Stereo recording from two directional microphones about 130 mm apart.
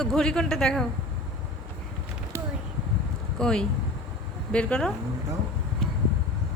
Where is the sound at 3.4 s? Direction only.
5° left (ahead or behind).